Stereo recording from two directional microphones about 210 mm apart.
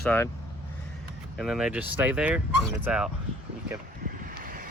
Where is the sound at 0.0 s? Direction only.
5° left (ahead or behind).